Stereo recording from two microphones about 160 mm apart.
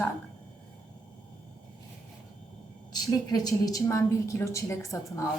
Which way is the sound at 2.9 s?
25° left (ahead or behind).